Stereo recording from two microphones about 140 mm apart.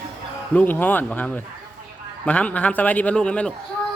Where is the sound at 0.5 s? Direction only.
15° left (ahead or behind).